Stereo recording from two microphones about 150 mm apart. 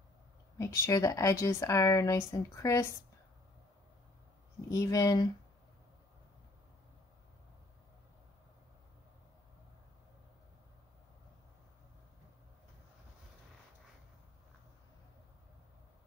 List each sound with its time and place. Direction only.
0.6 s speech: 20° left (ahead or behind)
4.6 s speech: 25° left (ahead or behind)